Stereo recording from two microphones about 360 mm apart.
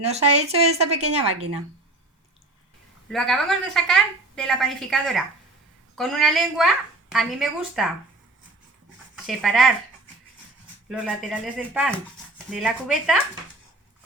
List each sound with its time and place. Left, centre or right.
0.0 s speech: centre
3.1 s a woman's voice: centre
9.2 s a woman's voice: centre
10.8 s a woman's voice: centre